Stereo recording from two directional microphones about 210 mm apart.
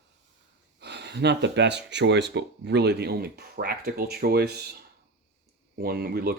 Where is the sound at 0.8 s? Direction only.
55° right (ahead or behind).